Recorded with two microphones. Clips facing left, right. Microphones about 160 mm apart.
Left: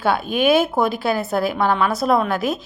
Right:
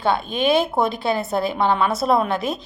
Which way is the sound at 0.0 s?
5° left (ahead or behind).